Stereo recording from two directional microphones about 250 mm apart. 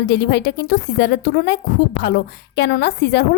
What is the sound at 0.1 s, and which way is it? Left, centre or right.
A woman's voice, left.